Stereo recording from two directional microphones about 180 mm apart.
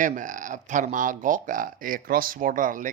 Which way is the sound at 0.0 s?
45° right (ahead or behind).